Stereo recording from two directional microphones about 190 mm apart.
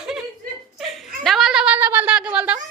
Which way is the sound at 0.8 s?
Centre (ahead or behind).